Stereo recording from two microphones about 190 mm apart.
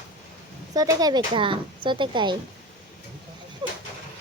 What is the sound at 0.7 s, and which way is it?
Speech, 20° right (ahead or behind).